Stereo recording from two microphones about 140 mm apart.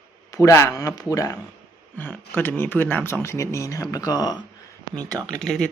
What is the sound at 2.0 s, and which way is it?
Speech, 15° left (ahead or behind).